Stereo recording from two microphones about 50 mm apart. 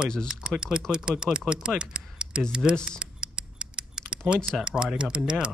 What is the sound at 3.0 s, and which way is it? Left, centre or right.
Typing, centre.